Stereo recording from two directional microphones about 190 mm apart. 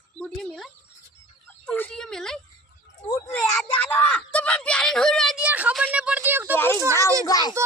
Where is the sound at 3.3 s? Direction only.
10° left (ahead or behind); by 6.6 s 10° right (ahead or behind).